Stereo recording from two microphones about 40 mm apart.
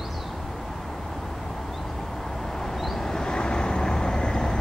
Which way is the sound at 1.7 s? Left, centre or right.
Centre.